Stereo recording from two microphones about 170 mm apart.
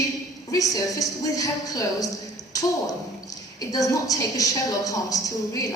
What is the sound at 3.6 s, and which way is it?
A woman's voice, 20° left (ahead or behind).